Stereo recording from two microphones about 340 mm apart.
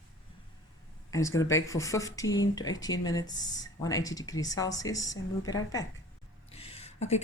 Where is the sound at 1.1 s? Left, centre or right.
Centre.